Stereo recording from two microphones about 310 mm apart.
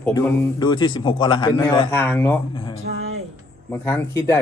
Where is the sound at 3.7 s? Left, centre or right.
Centre.